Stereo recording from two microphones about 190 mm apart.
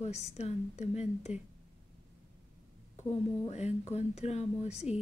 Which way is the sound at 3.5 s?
35° left (ahead or behind).